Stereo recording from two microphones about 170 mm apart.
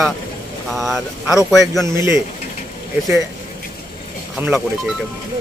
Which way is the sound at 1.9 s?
15° right (ahead or behind).